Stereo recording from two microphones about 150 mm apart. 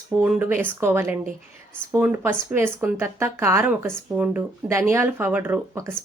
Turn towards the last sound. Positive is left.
turn(degrees=-15)  # may be behind; listen again after turning